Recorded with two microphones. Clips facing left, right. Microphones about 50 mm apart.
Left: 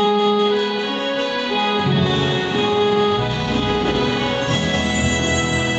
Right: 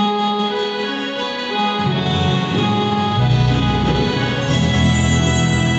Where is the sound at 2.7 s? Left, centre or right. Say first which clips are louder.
Left 2 dB; centre.